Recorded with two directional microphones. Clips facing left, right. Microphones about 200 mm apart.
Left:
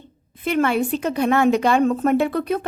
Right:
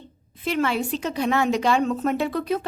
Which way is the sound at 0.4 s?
55° left (ahead or behind).